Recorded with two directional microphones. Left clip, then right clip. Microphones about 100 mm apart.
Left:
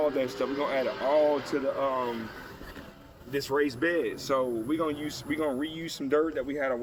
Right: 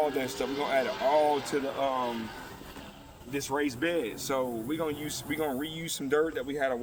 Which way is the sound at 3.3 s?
Centre (ahead or behind).